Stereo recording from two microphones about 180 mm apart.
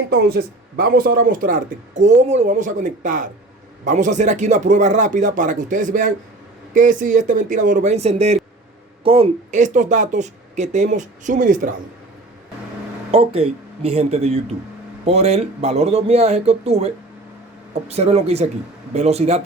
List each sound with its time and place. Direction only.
0.1 s speech: 55° right (ahead or behind)
13.1 s speech: 30° right (ahead or behind)